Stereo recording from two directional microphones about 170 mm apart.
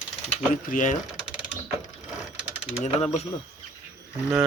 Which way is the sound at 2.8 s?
40° left (ahead or behind).